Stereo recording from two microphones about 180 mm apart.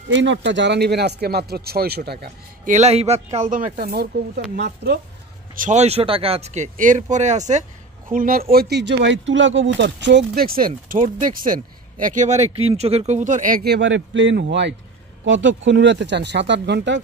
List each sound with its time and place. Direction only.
0.1 s speech: 90° right; by 2.7 s 65° right (ahead or behind)
2.7 s speech: 35° right (ahead or behind)
3.8 s speech: 60° right (ahead or behind)
5.6 s speech: 40° right (ahead or behind)
8.1 s speech: 50° right (ahead or behind)
13.7 s speech: 90° right
15.2 s speech: 90° right